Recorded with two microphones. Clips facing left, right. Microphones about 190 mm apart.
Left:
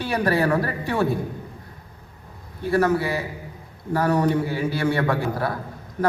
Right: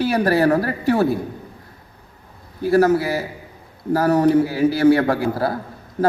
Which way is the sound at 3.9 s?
35° right (ahead or behind).